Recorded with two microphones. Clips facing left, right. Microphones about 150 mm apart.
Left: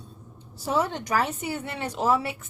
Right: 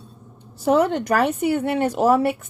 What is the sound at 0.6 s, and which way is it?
Speech, 60° right (ahead or behind).